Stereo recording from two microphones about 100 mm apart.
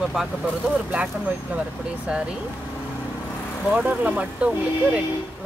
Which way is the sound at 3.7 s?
15° right (ahead or behind).